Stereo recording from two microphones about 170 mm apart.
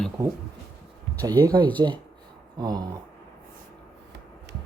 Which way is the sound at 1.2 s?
20° right (ahead or behind).